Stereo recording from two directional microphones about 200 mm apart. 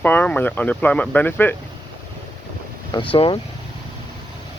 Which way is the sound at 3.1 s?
25° left (ahead or behind).